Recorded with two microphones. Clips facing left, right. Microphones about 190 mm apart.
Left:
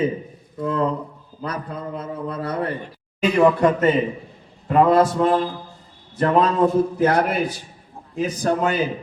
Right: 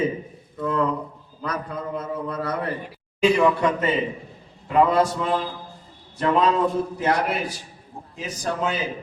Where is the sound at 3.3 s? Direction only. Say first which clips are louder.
Left 4 dB; 50° left (ahead or behind).